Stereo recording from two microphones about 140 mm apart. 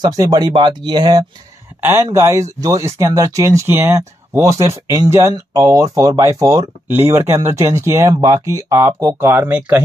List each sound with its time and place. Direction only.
0.0 s speech: 30° right (ahead or behind)
1.8 s speech: 20° right (ahead or behind)